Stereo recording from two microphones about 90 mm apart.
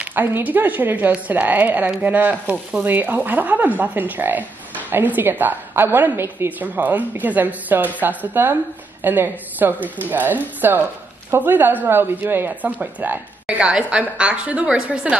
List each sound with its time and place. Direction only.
0.0 s a woman's voice: 20° right (ahead or behind)